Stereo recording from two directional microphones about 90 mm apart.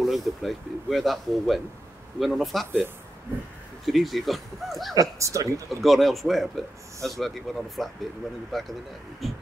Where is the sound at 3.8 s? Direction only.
Centre (ahead or behind).